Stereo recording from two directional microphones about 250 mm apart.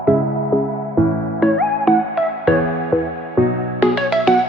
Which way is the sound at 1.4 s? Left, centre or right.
Centre.